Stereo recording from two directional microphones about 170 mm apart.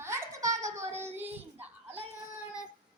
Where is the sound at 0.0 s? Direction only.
15° right (ahead or behind).